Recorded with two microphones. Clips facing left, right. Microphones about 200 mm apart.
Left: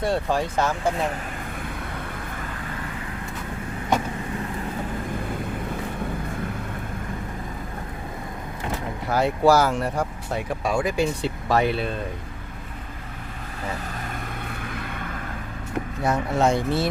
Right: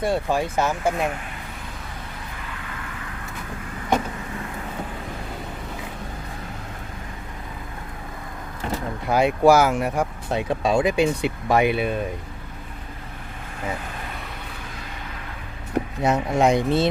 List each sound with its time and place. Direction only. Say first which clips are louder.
0.0 s speech: right 1 dB; 10° right (ahead or behind)
9.0 s speech: right 2 dB; 15° right (ahead or behind)
10.3 s speech: right 4 dB; 25° right (ahead or behind)
16.0 s speech: right 2 dB; 15° right (ahead or behind)